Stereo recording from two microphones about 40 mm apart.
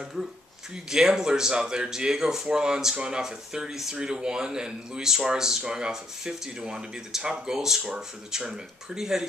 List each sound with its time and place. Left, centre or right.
0.8 s speech: centre